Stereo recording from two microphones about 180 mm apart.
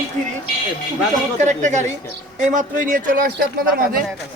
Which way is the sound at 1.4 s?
40° right (ahead or behind).